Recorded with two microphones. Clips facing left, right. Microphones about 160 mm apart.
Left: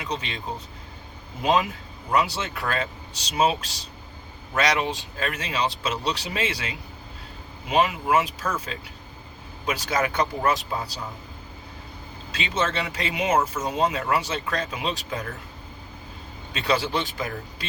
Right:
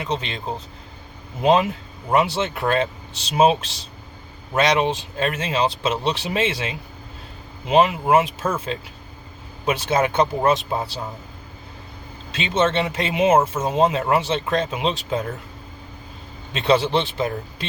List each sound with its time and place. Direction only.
0.0 s speech: 25° right (ahead or behind)
2.0 s speech: 25° right (ahead or behind)
7.9 s speech: 25° right (ahead or behind)
12.3 s speech: 25° right (ahead or behind)
16.5 s speech: 25° right (ahead or behind)